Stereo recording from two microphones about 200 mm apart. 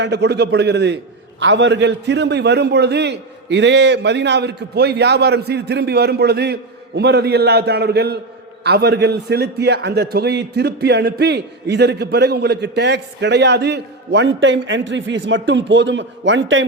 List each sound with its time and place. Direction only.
0.0 s a man's voice: 60° right (ahead or behind)